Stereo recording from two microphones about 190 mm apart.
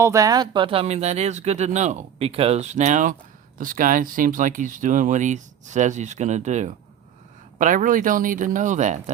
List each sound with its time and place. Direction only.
0.0 s speech: 15° right (ahead or behind); by 9.1 s 40° right (ahead or behind)